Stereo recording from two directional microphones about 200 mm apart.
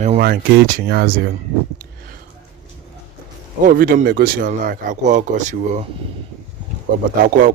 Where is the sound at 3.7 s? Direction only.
45° right (ahead or behind).